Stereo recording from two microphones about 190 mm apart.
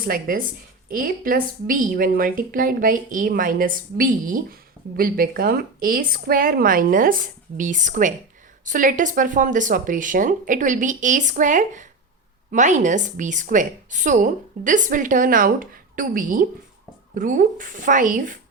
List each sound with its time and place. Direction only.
0.0 s a woman's voice: 50° right (ahead or behind)